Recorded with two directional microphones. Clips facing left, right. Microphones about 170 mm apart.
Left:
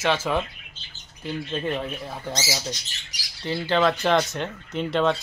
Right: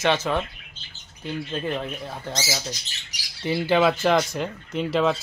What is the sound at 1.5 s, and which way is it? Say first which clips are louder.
Speech: left 1 dB; centre (ahead or behind).